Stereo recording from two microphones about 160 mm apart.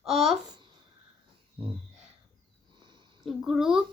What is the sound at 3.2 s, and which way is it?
Speech, centre (ahead or behind).